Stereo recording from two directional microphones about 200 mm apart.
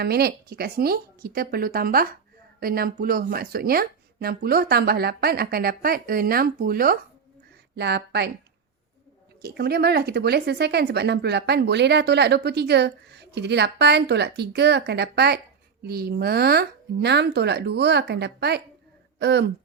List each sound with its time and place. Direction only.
0.0 s speech: 50° right (ahead or behind)
9.4 s speech: 50° right (ahead or behind)